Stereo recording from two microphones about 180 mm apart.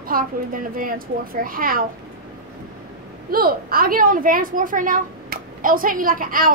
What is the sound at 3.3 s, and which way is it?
A woman's voice, 55° right (ahead or behind).